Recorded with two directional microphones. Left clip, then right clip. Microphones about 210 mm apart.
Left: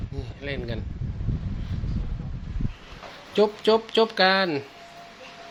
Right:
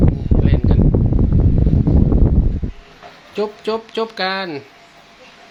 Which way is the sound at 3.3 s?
5° left (ahead or behind).